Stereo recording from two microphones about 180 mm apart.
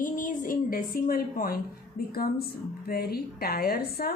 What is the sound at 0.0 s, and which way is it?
A woman's voice, 50° left (ahead or behind).